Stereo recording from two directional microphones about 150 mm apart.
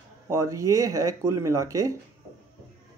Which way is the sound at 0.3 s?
20° right (ahead or behind).